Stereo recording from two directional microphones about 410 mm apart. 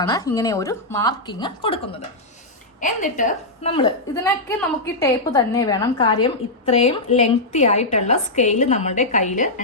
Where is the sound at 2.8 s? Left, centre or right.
Centre.